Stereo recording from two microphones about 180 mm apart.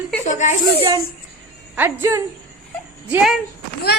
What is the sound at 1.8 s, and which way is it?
Speech, 15° right (ahead or behind).